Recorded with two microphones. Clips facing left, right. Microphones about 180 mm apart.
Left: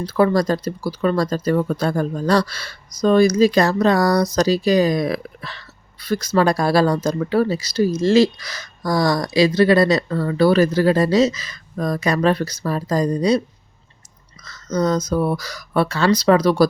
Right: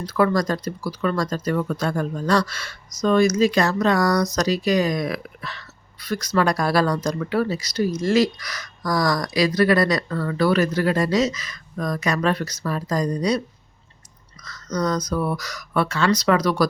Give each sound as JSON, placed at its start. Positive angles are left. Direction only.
{"t": 0.0, "sound": "speech", "side_deg": 30}
{"t": 14.4, "sound": "speech", "side_deg": 25}